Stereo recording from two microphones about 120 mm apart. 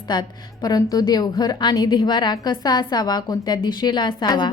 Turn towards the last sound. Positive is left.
turn(degrees=35)  # may be behind; listen again after turning